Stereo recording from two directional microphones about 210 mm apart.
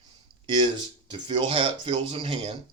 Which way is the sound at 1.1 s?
20° right (ahead or behind).